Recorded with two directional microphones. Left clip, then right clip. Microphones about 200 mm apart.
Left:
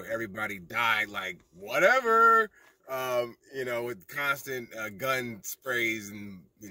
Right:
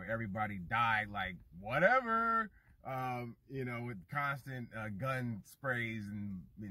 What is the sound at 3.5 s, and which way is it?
Speech, 20° left (ahead or behind).